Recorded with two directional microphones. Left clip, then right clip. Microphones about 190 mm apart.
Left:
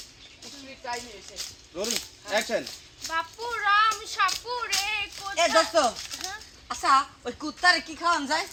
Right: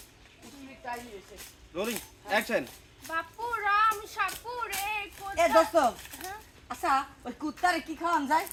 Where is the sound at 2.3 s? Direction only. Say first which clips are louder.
Left 1 dB; 65° right (ahead or behind).